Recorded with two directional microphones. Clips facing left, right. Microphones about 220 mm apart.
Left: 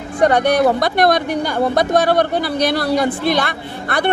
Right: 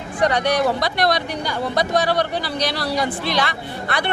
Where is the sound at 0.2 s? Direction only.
55° left (ahead or behind).